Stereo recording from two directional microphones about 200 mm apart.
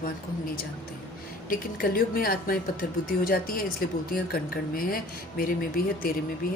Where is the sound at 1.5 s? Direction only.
45° left (ahead or behind).